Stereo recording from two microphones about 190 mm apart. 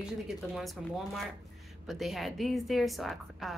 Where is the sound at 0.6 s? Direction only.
Centre (ahead or behind).